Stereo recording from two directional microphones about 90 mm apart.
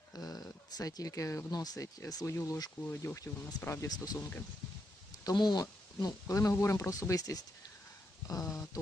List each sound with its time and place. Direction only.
0.1 s a sound: 40° left (ahead or behind)
1.5 s speech: 45° left (ahead or behind)
2.8 s speech: 20° left (ahead or behind)
3.8 s speech: 45° left (ahead or behind)
5.2 s speech: 50° left (ahead or behind)